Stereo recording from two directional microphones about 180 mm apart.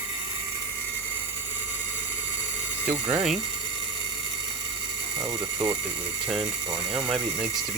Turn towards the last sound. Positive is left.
turn(degrees=-5)  # may be behind; listen again after turning